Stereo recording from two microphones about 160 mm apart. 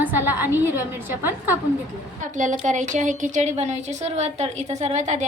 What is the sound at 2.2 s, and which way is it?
A woman's voice, 50° right (ahead or behind).